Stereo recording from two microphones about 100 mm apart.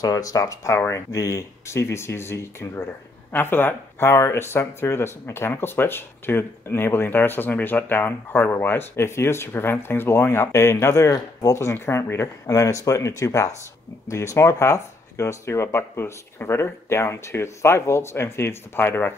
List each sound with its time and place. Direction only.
0.0 s speech: 35° left (ahead or behind)